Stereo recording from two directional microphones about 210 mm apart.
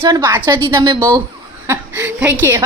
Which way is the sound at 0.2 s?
10° right (ahead or behind).